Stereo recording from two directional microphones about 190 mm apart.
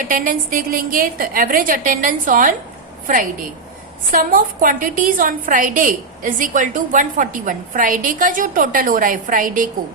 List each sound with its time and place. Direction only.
0.0 s a woman's voice: 45° right (ahead or behind)